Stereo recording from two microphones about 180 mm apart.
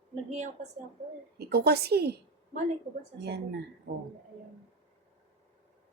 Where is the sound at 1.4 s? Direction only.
65° right (ahead or behind).